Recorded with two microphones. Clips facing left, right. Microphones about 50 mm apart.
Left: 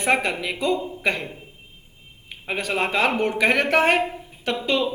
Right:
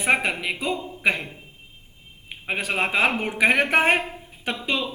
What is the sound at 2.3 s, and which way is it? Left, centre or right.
A man's voice, right.